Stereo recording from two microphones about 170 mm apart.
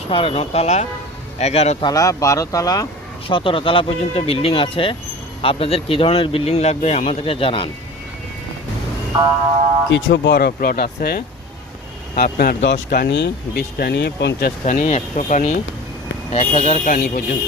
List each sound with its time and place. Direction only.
0.1 s speech: 30° left (ahead or behind)
1.8 s speech: 20° left (ahead or behind)
3.2 s speech: 30° left (ahead or behind)
9.9 s speech: 90° left; by 12.5 s 65° left (ahead or behind)
12.6 s speech: 80° left
14.6 s speech: 50° left (ahead or behind)